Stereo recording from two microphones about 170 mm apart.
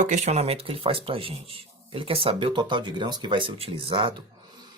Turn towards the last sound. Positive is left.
turn(degrees=-30)  # may be behind; listen again after turning